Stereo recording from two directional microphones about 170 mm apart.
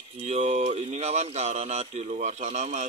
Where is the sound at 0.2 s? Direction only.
40° right (ahead or behind).